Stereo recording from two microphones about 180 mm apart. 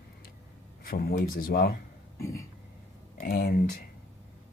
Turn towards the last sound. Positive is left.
turn(degrees=60)  # may be behind; listen again after turning